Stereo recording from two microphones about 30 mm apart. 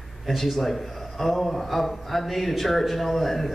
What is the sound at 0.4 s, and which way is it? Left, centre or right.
A man's voice, centre.